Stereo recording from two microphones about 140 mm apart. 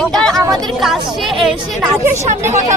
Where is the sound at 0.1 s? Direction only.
5° left (ahead or behind).